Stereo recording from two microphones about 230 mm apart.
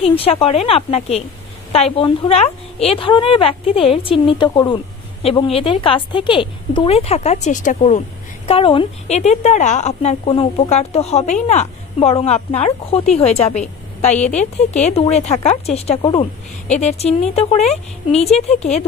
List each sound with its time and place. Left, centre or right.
0.0 s a woman's voice: left